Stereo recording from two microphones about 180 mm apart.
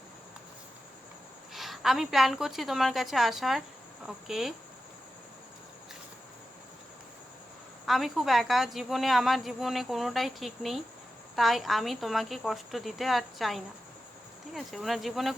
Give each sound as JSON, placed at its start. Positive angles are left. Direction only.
{"t": 1.5, "sound": "a woman's voice", "side_deg": 0}
{"t": 7.9, "sound": "a woman's voice", "side_deg": 0}